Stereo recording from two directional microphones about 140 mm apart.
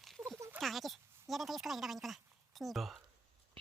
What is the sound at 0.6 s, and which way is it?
A woman's voice, centre (ahead or behind).